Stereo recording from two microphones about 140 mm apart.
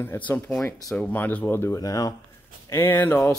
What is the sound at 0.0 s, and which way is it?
Speech, 15° left (ahead or behind).